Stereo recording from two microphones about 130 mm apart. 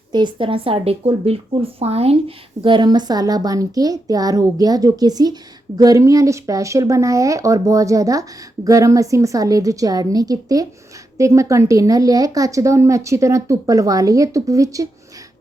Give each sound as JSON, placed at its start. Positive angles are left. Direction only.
{"t": 0.1, "sound": "speech", "side_deg": -35}